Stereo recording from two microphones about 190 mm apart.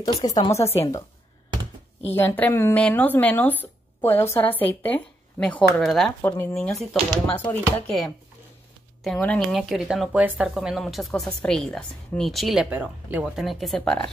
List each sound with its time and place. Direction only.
0.2 s speech: 20° left (ahead or behind)
2.0 s speech: 10° left (ahead or behind)